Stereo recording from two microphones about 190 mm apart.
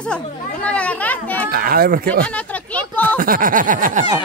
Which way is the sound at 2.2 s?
5° left (ahead or behind).